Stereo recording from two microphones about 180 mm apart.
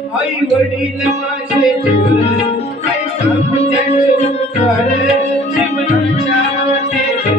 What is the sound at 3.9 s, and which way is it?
Music, 40° left (ahead or behind).